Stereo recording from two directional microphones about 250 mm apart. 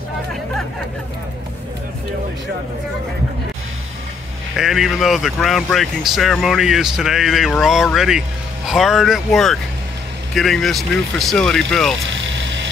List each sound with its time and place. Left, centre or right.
4.6 s speech: centre
12.1 s vehicle: right